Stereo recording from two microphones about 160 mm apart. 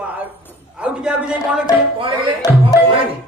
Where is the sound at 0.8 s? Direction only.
5° right (ahead or behind).